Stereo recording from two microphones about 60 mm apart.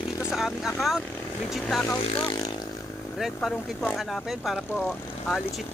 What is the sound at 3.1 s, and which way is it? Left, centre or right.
Speech, centre.